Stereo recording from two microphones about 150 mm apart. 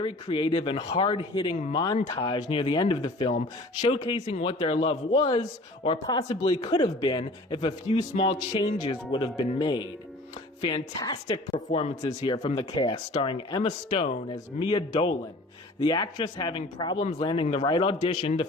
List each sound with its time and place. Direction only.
0.0 s speech: 35° left (ahead or behind)
4.3 s speech: 45° left (ahead or behind)
12.2 s speech: 35° left (ahead or behind)